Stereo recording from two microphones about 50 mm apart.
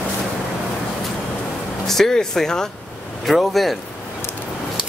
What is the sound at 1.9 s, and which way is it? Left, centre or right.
Speech, centre.